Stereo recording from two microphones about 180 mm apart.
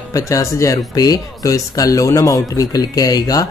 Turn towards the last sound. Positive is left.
turn(degrees=20)  # may be behind; listen again after turning